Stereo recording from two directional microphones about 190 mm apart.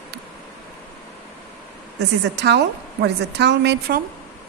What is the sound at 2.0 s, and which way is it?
A woman's voice, 65° right (ahead or behind).